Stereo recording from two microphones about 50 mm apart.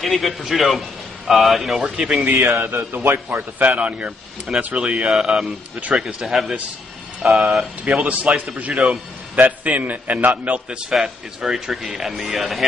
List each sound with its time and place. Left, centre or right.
0.0 s a man's voice: centre
2.2 s a man's voice: right
3.5 s a man's voice: right
5.1 s speech: centre
5.8 s a man's voice: right
6.0 s speech: centre
7.8 s a man's voice: right
8.7 s speech: centre
9.3 s a man's voice: right
10.8 s speech: centre